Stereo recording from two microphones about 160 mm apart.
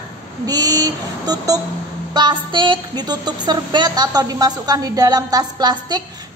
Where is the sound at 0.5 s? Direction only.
25° right (ahead or behind).